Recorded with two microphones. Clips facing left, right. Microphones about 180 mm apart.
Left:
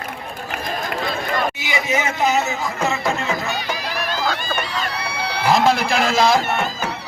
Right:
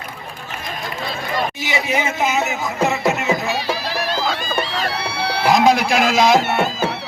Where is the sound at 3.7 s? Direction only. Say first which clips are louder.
Right 3 dB; 30° right (ahead or behind).